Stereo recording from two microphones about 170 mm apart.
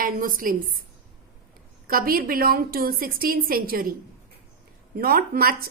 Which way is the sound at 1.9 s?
60° right (ahead or behind).